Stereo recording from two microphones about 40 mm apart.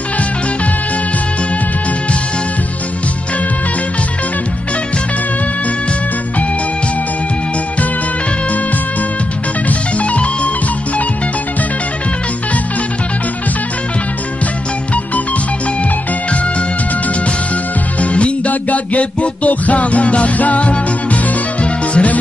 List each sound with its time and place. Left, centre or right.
9.7 s music: left
18.0 s music: left